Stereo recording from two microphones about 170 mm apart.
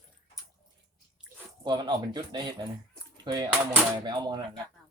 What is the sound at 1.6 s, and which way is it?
Speech, 25° right (ahead or behind).